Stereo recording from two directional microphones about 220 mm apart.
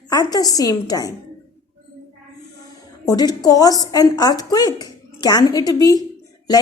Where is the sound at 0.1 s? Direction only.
15° left (ahead or behind).